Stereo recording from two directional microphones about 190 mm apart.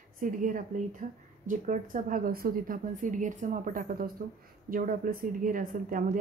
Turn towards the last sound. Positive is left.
turn(degrees=-45)  # may be behind; listen again after turning